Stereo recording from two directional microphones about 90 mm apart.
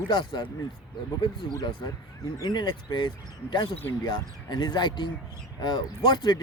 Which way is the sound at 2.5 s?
65° left (ahead or behind).